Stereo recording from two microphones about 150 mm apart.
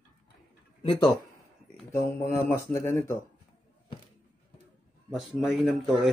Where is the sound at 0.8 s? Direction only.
25° left (ahead or behind).